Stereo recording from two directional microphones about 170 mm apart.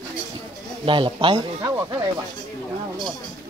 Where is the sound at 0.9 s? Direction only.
30° right (ahead or behind).